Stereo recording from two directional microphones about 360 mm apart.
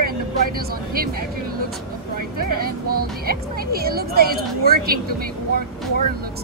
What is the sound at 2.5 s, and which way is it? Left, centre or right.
Speech, right.